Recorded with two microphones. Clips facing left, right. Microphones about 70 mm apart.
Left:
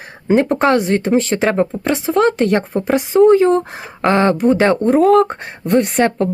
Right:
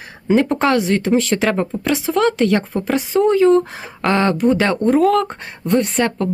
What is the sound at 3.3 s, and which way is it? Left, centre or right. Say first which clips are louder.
A woman's voice: left 1 dB; left.